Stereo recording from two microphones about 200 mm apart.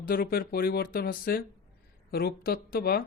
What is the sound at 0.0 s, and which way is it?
Speech, 50° left (ahead or behind).